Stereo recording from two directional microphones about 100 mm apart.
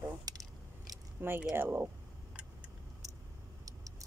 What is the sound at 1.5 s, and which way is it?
Speech, 20° right (ahead or behind).